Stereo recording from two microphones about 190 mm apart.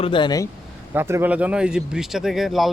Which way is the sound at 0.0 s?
25° left (ahead or behind).